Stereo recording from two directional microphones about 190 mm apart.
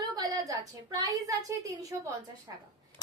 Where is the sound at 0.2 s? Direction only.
20° right (ahead or behind).